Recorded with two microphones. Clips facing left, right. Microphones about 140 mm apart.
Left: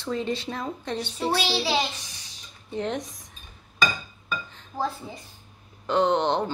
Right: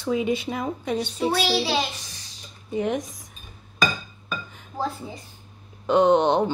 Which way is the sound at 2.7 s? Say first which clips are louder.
Right 4 dB; 10° right (ahead or behind).